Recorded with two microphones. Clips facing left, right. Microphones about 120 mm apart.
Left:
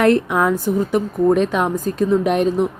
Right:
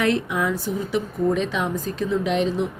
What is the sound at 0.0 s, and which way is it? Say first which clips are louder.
A woman's voice: left 7 dB; 55° left (ahead or behind).